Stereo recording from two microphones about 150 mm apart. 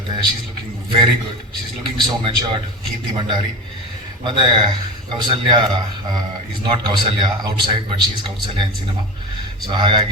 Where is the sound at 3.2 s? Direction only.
30° right (ahead or behind).